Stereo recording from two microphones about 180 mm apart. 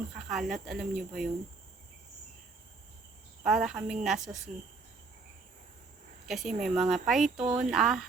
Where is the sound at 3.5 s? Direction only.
5° right (ahead or behind).